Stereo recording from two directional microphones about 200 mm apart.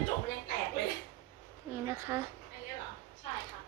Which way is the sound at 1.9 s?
10° right (ahead or behind).